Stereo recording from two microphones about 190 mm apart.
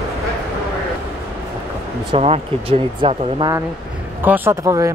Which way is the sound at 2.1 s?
30° right (ahead or behind).